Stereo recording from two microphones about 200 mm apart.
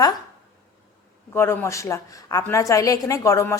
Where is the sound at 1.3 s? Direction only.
10° left (ahead or behind).